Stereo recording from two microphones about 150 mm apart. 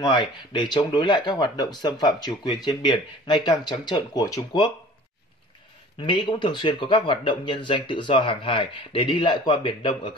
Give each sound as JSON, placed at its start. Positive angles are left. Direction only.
{"t": 0.0, "sound": "speech", "side_deg": 30}
{"t": 5.9, "sound": "speech", "side_deg": 35}